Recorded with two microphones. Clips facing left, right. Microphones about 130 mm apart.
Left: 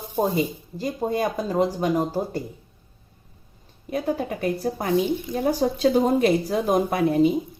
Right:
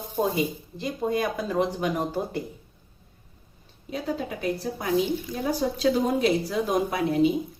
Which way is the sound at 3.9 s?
55° left (ahead or behind).